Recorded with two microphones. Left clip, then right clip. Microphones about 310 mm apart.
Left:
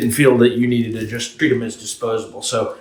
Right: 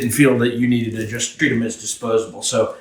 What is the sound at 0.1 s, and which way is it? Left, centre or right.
Speech, centre.